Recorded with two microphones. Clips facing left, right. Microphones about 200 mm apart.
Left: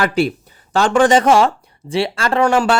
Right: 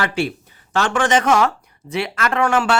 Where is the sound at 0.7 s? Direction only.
35° left (ahead or behind).